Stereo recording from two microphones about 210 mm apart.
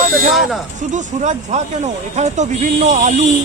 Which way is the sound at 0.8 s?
35° right (ahead or behind).